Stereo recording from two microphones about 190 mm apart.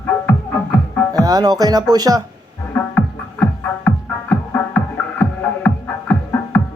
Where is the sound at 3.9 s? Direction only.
10° left (ahead or behind).